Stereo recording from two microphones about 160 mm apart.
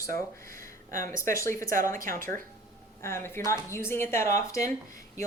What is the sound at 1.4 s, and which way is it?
Speech, 20° left (ahead or behind).